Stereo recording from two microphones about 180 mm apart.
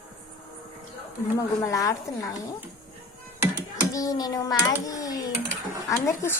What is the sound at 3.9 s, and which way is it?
A child's voice, 20° left (ahead or behind).